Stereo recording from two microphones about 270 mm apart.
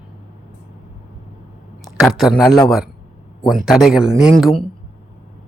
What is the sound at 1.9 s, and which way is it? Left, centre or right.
Speech, centre.